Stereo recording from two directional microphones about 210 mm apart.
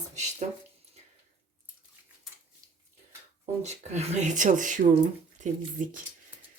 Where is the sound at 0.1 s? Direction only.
35° right (ahead or behind).